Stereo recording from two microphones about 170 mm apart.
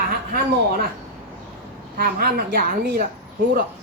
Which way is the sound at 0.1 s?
65° right (ahead or behind).